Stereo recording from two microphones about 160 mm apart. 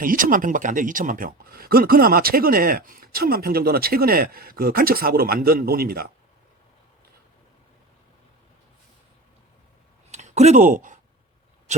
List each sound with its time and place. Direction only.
0.0 s speech: 60° right (ahead or behind)
10.1 s speech: 45° right (ahead or behind)